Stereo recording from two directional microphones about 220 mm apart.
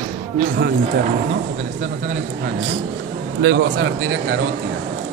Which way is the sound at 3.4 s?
60° right (ahead or behind).